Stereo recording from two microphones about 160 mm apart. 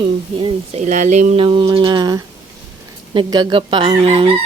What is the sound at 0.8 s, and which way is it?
Speech, 50° right (ahead or behind).